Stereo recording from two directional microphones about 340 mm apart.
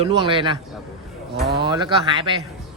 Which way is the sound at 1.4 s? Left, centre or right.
Right.